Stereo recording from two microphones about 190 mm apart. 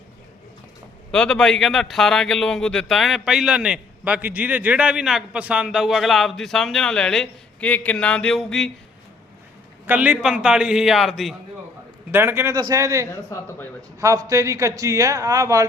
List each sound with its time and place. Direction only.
1.1 s a man's voice: 5° left (ahead or behind)
9.8 s a man's voice: 10° right (ahead or behind)
12.1 s a man's voice: 10° right (ahead or behind)
13.1 s a woman's voice: 15° left (ahead or behind)
14.0 s a man's voice: 15° right (ahead or behind)